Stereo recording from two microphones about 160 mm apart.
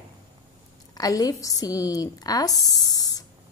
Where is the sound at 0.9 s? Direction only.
25° left (ahead or behind).